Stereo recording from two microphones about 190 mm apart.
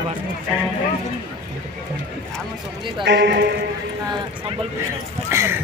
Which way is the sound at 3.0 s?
65° right (ahead or behind).